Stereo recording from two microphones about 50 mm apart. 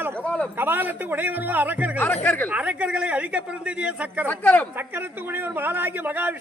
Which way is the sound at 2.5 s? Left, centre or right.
Right.